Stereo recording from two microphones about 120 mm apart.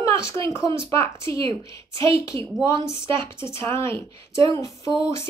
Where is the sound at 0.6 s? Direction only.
45° right (ahead or behind).